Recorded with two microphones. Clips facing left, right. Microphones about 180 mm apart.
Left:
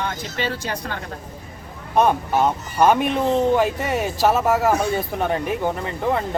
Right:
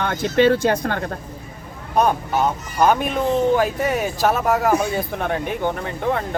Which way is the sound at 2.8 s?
Centre (ahead or behind).